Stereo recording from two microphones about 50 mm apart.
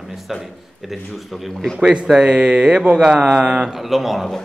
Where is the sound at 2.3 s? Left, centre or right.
Centre.